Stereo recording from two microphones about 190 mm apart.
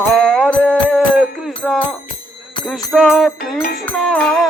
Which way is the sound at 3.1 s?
Centre (ahead or behind).